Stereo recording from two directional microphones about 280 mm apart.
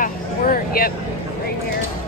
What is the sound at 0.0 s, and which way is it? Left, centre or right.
Vehicle, left.